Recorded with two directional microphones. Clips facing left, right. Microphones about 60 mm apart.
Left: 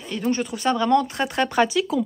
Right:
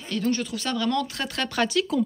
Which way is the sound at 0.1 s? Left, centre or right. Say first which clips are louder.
Left 2 dB; left.